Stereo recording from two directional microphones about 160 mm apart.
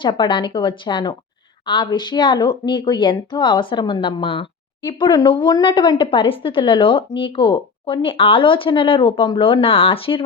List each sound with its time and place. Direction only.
0.0 s speech: 30° left (ahead or behind)